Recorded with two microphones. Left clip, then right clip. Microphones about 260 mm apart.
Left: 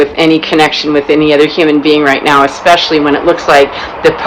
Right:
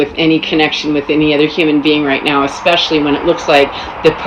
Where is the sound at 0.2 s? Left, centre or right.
Centre.